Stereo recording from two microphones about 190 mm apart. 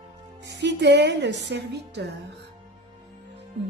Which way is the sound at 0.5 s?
65° right (ahead or behind).